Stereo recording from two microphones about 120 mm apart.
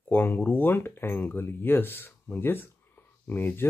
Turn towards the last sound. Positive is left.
turn(degrees=15)  # may be behind; listen again after turning